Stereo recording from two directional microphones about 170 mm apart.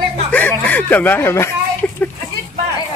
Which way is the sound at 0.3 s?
10° left (ahead or behind).